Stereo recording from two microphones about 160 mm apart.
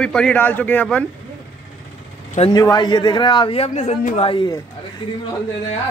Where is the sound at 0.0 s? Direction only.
5° left (ahead or behind).